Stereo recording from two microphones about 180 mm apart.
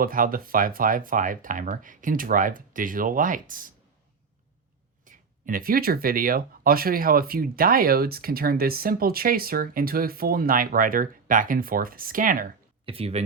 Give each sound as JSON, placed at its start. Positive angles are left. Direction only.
{"t": 0.0, "sound": "speech", "side_deg": -50}
{"t": 5.0, "sound": "speech", "side_deg": -50}
{"t": 12.8, "sound": "speech", "side_deg": -30}